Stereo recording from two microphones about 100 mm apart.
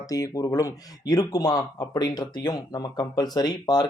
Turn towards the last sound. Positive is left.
turn(degrees=45)  # may be behind; listen again after turning